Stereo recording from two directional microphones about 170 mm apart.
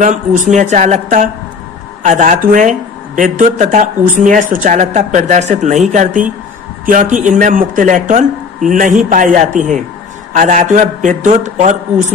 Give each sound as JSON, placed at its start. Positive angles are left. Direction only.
{"t": 0.0, "sound": "a woman's voice", "side_deg": -45}